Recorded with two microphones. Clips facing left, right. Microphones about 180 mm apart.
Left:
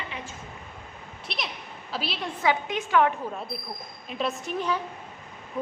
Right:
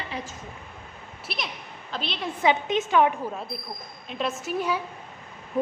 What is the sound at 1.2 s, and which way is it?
A woman's voice, centre (ahead or behind).